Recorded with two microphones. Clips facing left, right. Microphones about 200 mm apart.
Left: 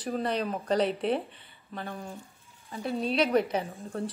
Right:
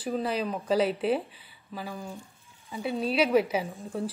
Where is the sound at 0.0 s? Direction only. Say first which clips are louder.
Right 1 dB; centre (ahead or behind).